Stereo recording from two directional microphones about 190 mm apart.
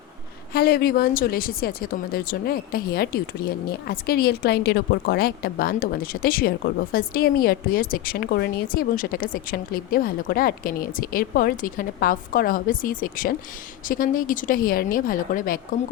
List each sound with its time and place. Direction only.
0.5 s a woman's voice: 50° left (ahead or behind)